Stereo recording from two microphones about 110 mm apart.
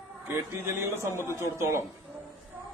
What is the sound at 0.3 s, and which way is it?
A man's voice, 25° right (ahead or behind).